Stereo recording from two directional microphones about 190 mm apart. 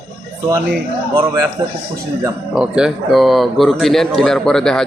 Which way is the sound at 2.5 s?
5° right (ahead or behind).